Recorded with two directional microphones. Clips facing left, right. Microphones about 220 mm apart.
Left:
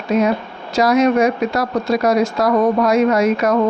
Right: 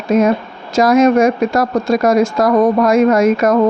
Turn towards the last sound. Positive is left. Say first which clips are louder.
# right 4 dB
turn(degrees=-50)  # may be behind; listen again after turning